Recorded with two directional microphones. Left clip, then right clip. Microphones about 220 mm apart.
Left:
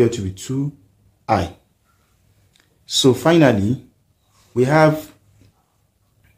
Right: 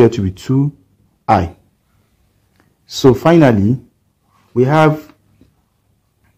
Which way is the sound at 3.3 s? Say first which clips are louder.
Right 4 dB; 25° right (ahead or behind).